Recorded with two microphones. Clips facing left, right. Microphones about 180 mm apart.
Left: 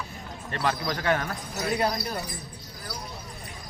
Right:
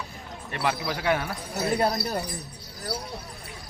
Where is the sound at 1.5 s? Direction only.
30° right (ahead or behind).